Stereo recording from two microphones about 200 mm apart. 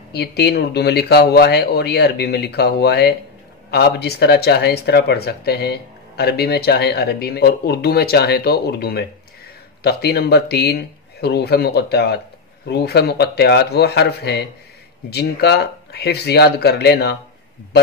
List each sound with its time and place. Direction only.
0.1 s speech: 55° left (ahead or behind)